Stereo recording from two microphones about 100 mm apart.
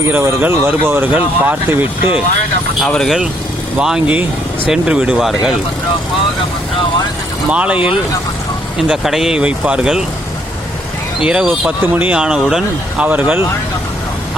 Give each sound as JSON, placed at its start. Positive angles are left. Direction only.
{"t": 0.0, "sound": "speech", "side_deg": -25}
{"t": 2.8, "sound": "speech", "side_deg": 5}
{"t": 3.8, "sound": "speech", "side_deg": -10}
{"t": 7.5, "sound": "speech", "side_deg": -15}
{"t": 8.9, "sound": "speech", "side_deg": -5}
{"t": 11.2, "sound": "speech", "side_deg": -10}